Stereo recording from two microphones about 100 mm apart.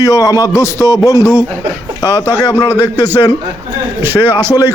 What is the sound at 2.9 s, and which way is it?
Speech, 25° right (ahead or behind).